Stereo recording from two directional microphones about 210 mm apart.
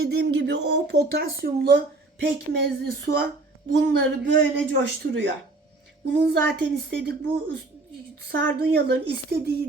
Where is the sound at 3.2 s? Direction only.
50° right (ahead or behind).